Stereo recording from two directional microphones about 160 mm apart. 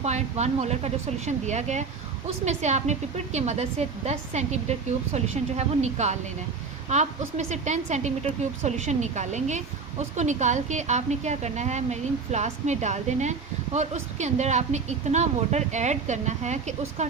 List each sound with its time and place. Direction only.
0.0 s a woman's voice: 45° right (ahead or behind)